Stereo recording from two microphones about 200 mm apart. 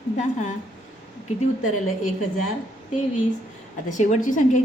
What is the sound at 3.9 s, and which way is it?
Speech, 40° left (ahead or behind).